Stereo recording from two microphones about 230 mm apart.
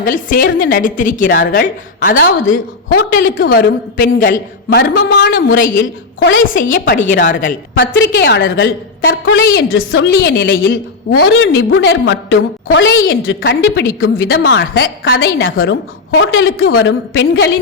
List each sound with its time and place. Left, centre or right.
0.0 s a woman's voice: left
3.4 s a woman's voice: left
4.8 s a woman's voice: left
6.4 s a woman's voice: left
6.9 s a woman's voice: left
7.2 s a woman's voice: left
7.8 s a woman's voice: left